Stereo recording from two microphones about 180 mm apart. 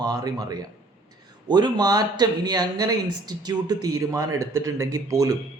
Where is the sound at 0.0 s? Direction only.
20° right (ahead or behind).